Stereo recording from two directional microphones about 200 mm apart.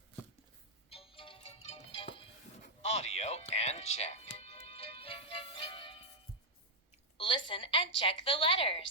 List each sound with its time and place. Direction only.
0.9 s music: 30° left (ahead or behind)
7.2 s a woman's voice: 25° left (ahead or behind)